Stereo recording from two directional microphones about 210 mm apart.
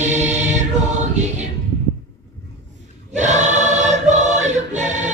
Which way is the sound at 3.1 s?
35° right (ahead or behind).